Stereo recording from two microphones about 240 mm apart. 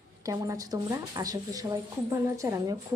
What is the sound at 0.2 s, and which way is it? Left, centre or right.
Speech, centre.